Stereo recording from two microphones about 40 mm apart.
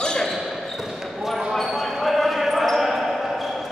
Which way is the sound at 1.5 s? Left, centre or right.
Centre.